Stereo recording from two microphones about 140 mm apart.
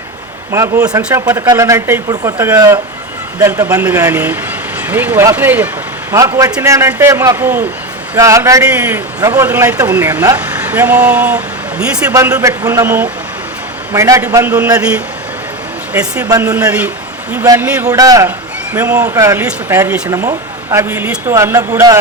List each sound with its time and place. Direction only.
0.5 s speech: 20° right (ahead or behind)
12.1 s speech: 20° right (ahead or behind)
17.3 s speech: 25° right (ahead or behind)
18.7 s speech: 15° right (ahead or behind)